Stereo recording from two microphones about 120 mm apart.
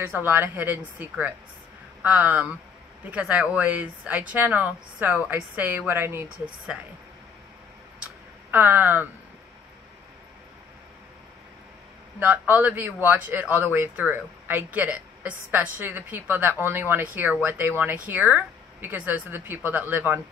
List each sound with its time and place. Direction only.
0.0 s speech: 20° right (ahead or behind)
8.0 s a sound: 15° right (ahead or behind)
12.2 s speech: 15° right (ahead or behind)